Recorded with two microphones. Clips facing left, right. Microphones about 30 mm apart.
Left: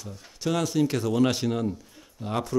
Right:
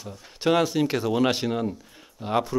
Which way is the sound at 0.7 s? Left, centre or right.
Right.